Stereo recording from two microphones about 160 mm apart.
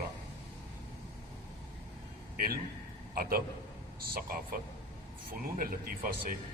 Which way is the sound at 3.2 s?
65° right (ahead or behind).